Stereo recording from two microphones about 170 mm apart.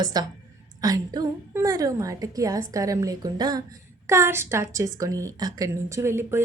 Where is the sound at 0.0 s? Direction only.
25° right (ahead or behind).